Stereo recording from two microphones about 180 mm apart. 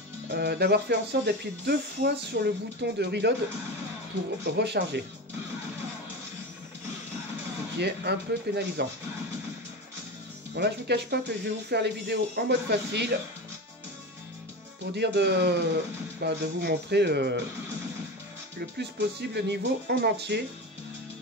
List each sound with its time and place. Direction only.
0.3 s speech: 65° right (ahead or behind)
4.5 s speech: 70° right (ahead or behind)
7.8 s speech: 70° right (ahead or behind)
10.5 s speech: 70° right (ahead or behind)
15.0 s speech: 70° right (ahead or behind)
18.8 s speech: 70° right (ahead or behind)